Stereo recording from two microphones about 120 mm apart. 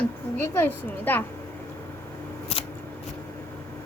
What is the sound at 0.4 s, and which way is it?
Speech, 15° left (ahead or behind).